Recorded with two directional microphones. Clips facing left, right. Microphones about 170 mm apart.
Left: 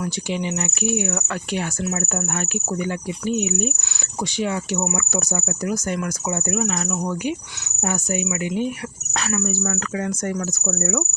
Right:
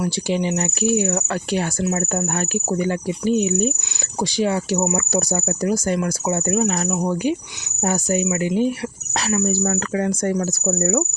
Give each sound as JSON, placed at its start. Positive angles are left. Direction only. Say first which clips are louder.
{"t": 0.0, "sound": "speech", "louder": "right 4 dB", "side_deg": -35}